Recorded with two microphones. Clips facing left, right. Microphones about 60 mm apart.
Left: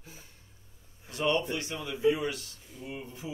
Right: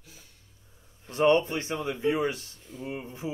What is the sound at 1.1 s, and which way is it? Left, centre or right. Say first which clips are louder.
Speech: right 6 dB; right.